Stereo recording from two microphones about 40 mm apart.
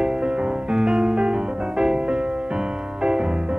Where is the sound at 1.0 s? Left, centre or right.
Centre.